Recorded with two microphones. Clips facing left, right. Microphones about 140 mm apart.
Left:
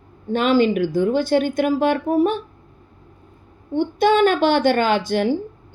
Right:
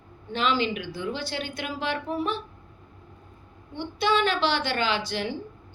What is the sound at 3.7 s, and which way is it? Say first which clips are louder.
A woman's voice: left 8 dB; 50° left (ahead or behind).